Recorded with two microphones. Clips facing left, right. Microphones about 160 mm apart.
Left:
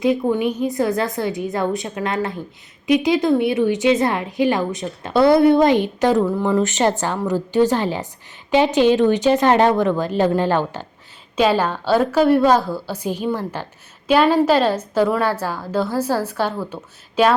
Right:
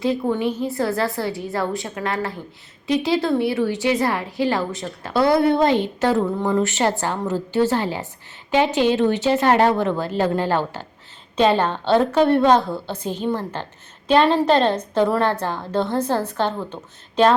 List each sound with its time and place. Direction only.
0.0 s a woman's voice: 15° left (ahead or behind)
11.6 s a woman's voice: 5° left (ahead or behind)